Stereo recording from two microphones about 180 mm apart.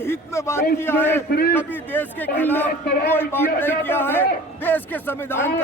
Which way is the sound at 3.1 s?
10° left (ahead or behind).